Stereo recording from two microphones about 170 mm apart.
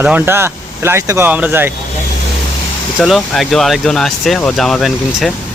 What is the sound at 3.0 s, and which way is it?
Speech, centre (ahead or behind).